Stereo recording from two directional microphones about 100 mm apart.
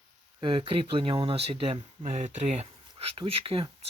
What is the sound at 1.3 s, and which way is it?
Speech, 80° right.